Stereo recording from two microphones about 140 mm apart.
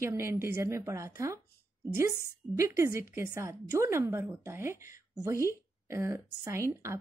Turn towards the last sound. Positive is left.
turn(degrees=-20)  # may be behind; listen again after turning